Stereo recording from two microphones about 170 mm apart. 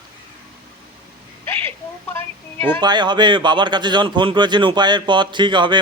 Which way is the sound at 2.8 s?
25° right (ahead or behind).